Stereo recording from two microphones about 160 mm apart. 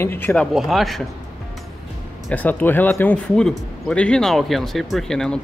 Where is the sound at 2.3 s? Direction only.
10° left (ahead or behind).